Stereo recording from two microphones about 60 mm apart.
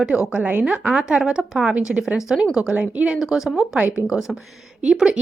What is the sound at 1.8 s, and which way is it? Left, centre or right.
A woman's voice, centre.